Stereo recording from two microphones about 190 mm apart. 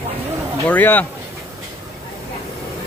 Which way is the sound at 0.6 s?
10° left (ahead or behind).